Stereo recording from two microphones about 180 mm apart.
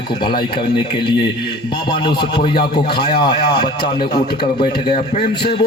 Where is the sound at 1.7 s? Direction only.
25° left (ahead or behind).